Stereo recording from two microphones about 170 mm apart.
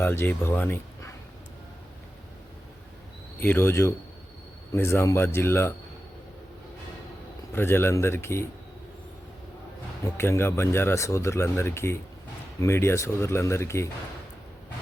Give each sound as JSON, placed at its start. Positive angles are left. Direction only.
{"t": 0.0, "sound": "speech", "side_deg": 15}
{"t": 3.4, "sound": "speech", "side_deg": 15}
{"t": 7.5, "sound": "speech", "side_deg": 15}
{"t": 10.2, "sound": "speech", "side_deg": 15}